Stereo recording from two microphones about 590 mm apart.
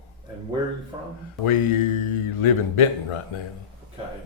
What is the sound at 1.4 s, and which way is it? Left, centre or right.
Speech, left.